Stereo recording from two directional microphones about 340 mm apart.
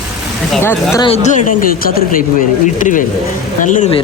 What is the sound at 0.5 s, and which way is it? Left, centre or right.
Speech, centre.